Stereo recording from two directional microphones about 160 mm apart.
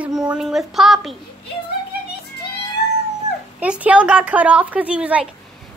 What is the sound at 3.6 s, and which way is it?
A child's voice, 10° right (ahead or behind).